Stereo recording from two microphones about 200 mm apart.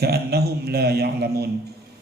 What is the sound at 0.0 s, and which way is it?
A man's voice, 50° right (ahead or behind).